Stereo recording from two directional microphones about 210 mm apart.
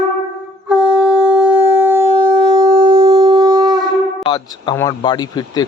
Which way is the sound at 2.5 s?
20° right (ahead or behind).